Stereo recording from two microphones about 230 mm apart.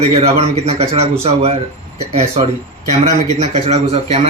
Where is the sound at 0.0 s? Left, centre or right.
Right.